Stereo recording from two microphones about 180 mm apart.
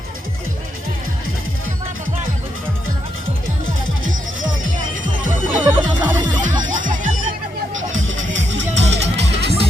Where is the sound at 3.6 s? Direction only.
90° right.